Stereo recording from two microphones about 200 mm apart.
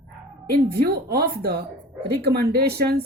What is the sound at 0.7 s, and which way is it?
Speech, 50° right (ahead or behind).